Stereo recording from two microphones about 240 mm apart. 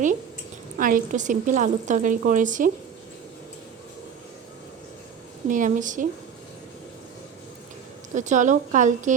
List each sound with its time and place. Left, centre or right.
0.8 s speech: right
5.5 s speech: right
8.1 s speech: right